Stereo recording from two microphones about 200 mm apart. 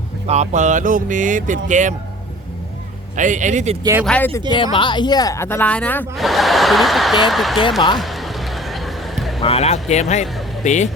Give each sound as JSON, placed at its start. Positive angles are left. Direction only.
{"t": 0.3, "sound": "speech", "side_deg": -35}
{"t": 3.2, "sound": "speech", "side_deg": -40}
{"t": 4.0, "sound": "speech", "side_deg": 5}
{"t": 4.5, "sound": "speech", "side_deg": 25}
{"t": 7.9, "sound": "a sound", "side_deg": 0}
{"t": 9.4, "sound": "speech", "side_deg": 30}